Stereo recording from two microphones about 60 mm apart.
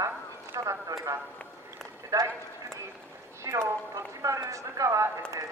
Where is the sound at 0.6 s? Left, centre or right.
Right.